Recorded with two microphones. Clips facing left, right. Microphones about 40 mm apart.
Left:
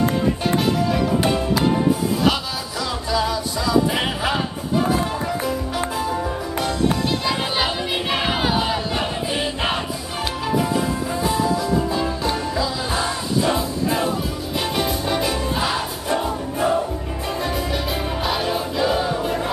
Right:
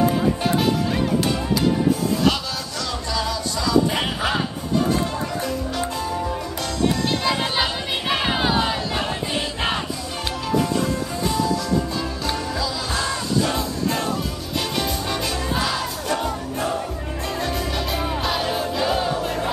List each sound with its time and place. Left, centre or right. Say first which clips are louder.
3.1 s music: left 4 dB; centre
7.2 s music: even; centre
18.2 s music: left 3 dB; centre